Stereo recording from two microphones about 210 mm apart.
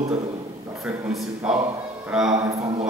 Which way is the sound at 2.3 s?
15° right (ahead or behind).